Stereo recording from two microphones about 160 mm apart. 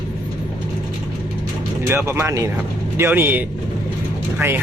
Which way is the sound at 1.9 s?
15° right (ahead or behind).